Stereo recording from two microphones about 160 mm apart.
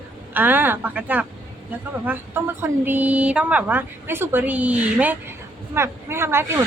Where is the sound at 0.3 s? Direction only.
10° right (ahead or behind).